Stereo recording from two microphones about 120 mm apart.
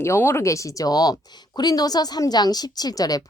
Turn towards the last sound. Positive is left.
turn(degrees=30)  # may be behind; listen again after turning